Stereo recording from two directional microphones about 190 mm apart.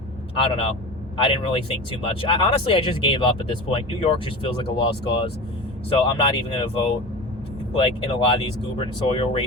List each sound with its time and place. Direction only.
0.3 s speech: 30° left (ahead or behind)
6.0 s speech: 30° left (ahead or behind)